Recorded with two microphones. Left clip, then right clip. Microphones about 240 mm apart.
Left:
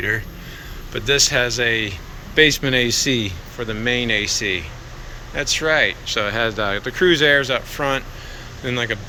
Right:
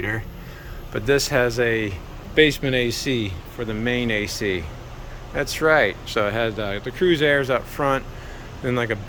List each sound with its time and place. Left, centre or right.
0.9 s speech: right